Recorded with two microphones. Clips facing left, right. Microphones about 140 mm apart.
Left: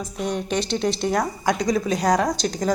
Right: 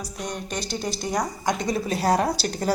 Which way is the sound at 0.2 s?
Centre (ahead or behind).